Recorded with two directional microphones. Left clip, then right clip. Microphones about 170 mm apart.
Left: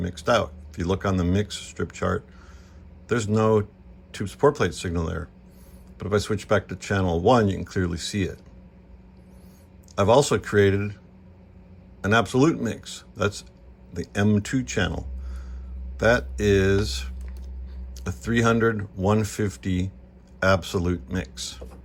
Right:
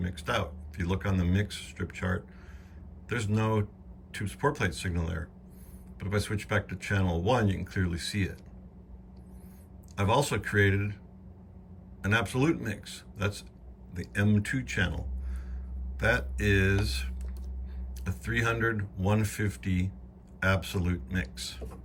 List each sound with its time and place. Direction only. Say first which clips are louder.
0.0 s speech: left 10 dB; 25° left (ahead or behind)
9.9 s speech: left 9 dB; 20° left (ahead or behind)
12.0 s speech: left 8 dB; 20° left (ahead or behind)